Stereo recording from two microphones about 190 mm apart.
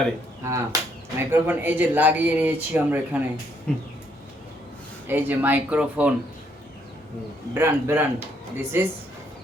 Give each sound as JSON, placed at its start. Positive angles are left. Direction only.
{"t": 0.4, "sound": "speech", "side_deg": -15}
{"t": 3.7, "sound": "a sound", "side_deg": 5}
{"t": 5.0, "sound": "speech", "side_deg": -10}
{"t": 7.5, "sound": "speech", "side_deg": -10}